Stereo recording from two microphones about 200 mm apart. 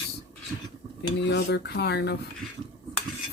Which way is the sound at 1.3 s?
55° left (ahead or behind).